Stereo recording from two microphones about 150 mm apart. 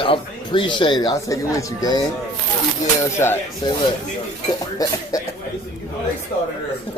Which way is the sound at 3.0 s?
20° left (ahead or behind).